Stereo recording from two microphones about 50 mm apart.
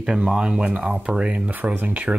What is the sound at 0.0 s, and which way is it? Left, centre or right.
Speech, centre.